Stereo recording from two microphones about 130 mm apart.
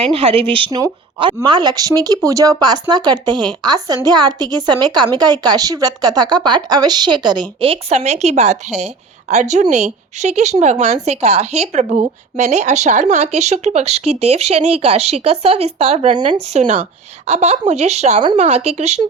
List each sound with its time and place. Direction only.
0.0 s speech: 50° right (ahead or behind)